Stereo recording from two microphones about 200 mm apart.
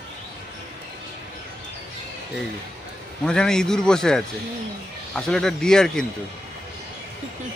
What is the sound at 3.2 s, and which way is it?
Speech, 5° left (ahead or behind).